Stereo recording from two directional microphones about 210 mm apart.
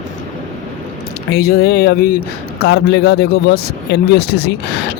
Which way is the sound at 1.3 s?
50° left (ahead or behind).